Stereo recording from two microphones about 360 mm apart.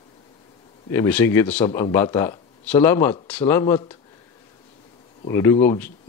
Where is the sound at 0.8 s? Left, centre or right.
Centre.